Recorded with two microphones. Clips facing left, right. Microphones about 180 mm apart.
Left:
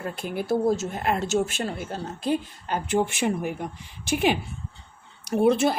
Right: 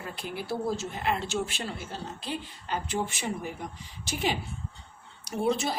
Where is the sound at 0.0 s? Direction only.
50° left (ahead or behind).